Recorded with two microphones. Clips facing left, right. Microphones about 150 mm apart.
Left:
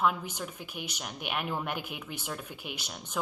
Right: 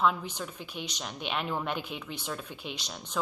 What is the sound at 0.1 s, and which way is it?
Speech, 10° left (ahead or behind).